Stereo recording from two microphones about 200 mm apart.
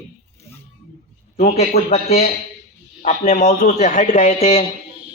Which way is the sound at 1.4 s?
35° left (ahead or behind).